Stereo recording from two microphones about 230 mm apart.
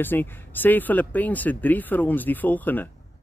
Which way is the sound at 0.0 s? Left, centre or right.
Centre.